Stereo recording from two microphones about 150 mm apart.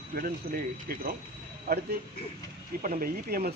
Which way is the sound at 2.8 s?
70° right (ahead or behind).